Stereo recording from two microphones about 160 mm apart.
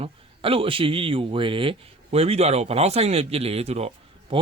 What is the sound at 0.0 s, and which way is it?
A man's voice, 35° right (ahead or behind).